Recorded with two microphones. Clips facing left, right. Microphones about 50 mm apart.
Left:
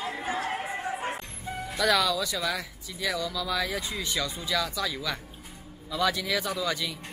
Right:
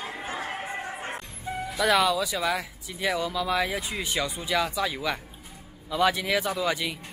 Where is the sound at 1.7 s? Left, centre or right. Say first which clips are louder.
Right 2 dB; centre.